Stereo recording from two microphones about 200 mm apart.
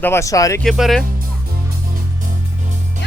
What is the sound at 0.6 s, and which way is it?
Speech, centre (ahead or behind).